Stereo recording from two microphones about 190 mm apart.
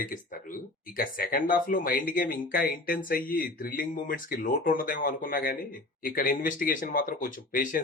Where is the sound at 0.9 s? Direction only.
50° left (ahead or behind).